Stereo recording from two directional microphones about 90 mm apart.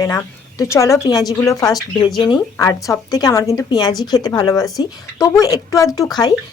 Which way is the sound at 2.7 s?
25° left (ahead or behind).